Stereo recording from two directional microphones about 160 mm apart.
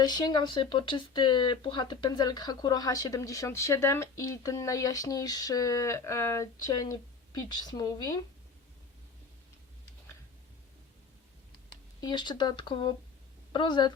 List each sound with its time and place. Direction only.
0.0 s speech: 25° left (ahead or behind)
11.9 s speech: 25° left (ahead or behind)